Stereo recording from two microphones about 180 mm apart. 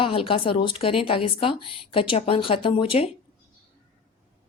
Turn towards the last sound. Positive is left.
turn(degrees=30)  # may be behind; listen again after turning